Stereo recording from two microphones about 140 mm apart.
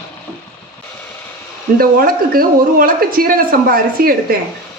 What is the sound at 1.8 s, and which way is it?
Speech, 90° right.